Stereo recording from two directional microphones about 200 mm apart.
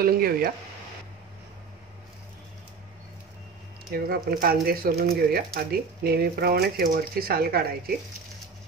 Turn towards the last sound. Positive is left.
turn(degrees=-50)  # may be behind; listen again after turning